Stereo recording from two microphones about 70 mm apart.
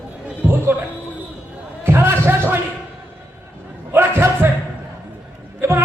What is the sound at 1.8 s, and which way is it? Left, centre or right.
Music, right.